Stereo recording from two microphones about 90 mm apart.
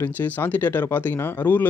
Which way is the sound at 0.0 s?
20° left (ahead or behind).